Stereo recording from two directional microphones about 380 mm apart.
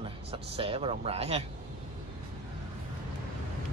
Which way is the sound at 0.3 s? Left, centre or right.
Centre.